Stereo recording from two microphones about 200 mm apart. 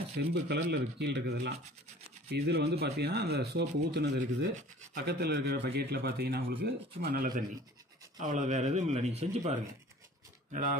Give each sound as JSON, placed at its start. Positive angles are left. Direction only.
{"t": 0.1, "sound": "speech", "side_deg": -55}
{"t": 10.5, "sound": "speech", "side_deg": -40}